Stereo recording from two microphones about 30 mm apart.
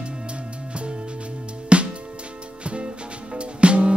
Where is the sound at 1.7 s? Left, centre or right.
Right.